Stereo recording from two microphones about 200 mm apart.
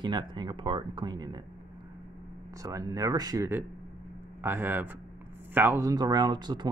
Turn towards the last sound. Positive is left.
turn(degrees=-20)  # may be behind; listen again after turning